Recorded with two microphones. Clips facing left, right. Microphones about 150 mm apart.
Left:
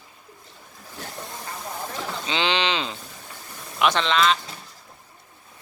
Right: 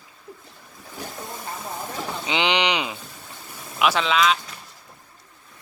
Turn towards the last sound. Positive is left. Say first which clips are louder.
# even
turn(degrees=-5)  # may be behind; listen again after turning